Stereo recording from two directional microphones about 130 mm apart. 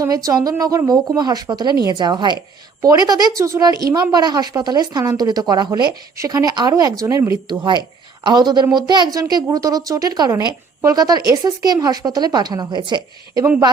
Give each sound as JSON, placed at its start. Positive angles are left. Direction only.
{"t": 0.0, "sound": "a woman's voice", "side_deg": -25}